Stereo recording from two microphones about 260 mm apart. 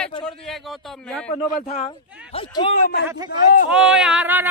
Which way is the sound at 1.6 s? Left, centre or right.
Left.